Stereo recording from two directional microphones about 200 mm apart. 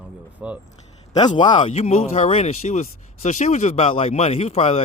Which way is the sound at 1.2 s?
20° left (ahead or behind).